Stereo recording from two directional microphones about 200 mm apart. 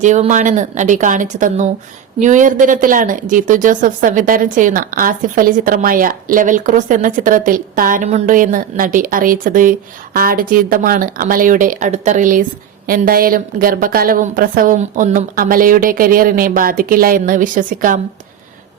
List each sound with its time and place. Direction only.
0.0 s a woman's voice: 35° right (ahead or behind)